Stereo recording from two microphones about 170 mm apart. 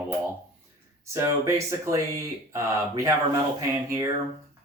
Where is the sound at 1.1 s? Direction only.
15° right (ahead or behind).